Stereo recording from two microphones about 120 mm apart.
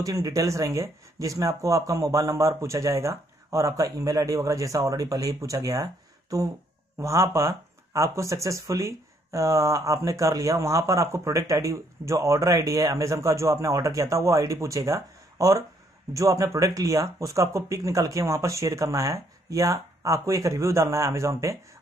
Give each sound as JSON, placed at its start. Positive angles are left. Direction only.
{"t": 0.0, "sound": "speech", "side_deg": -30}
{"t": 7.0, "sound": "speech", "side_deg": -25}